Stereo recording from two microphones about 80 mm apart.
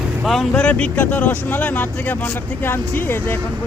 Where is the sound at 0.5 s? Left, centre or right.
Centre.